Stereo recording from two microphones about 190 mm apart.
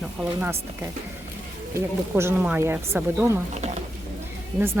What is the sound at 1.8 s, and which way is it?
Speech, 15° right (ahead or behind).